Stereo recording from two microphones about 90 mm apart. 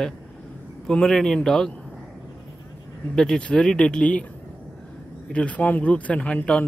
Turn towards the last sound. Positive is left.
turn(degrees=15)  # may be behind; listen again after turning